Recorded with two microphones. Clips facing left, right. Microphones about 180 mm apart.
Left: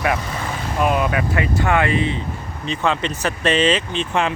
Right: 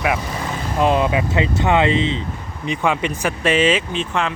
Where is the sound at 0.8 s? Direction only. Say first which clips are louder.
Right 2 dB; 25° right (ahead or behind); by 4.1 s 5° right (ahead or behind).